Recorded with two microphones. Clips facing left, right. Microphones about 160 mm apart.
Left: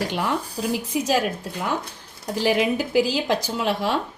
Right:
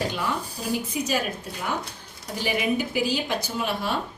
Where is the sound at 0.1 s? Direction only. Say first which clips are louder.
Left 4 dB; 90° left.